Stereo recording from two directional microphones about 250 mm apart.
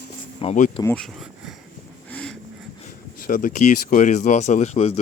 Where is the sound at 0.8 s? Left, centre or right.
Centre.